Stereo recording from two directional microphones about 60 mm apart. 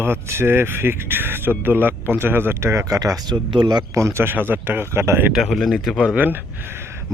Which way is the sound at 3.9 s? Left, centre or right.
Right.